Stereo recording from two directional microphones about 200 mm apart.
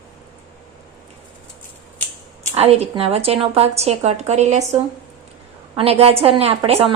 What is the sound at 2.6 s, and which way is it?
A woman's voice, 30° right (ahead or behind).